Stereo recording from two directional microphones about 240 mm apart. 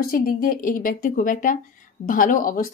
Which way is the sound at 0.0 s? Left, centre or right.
Left.